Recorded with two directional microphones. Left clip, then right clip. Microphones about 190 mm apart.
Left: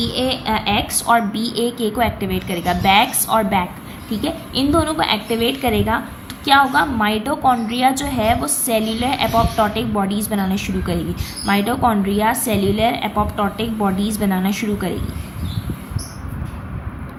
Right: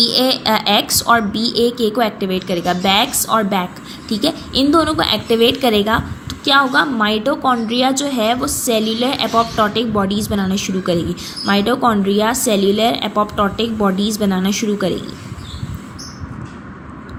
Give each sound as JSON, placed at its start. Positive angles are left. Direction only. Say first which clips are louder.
{"t": 0.0, "sound": "a woman's voice", "louder": "right 6 dB", "side_deg": -30}